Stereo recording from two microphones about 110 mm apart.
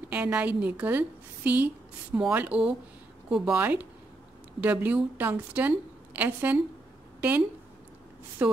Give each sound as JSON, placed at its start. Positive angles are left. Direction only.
{"t": 0.1, "sound": "a woman's voice", "side_deg": -10}
{"t": 3.5, "sound": "a woman's voice", "side_deg": -15}